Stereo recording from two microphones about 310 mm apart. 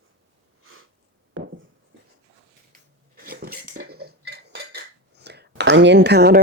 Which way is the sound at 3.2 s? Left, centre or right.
Right.